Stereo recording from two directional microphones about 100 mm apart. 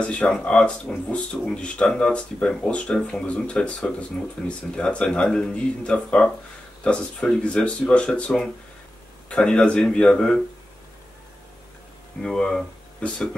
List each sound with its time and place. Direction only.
0.0 s speech: 10° left (ahead or behind)
12.2 s speech: 5° left (ahead or behind)